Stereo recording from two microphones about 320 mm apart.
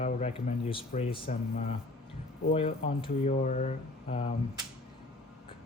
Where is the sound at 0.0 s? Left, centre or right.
Centre.